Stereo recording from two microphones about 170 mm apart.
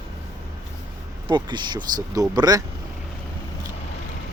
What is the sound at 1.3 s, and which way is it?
Speech, 25° right (ahead or behind).